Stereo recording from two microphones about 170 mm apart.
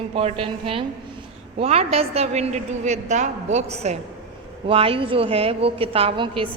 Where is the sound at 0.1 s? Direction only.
35° right (ahead or behind).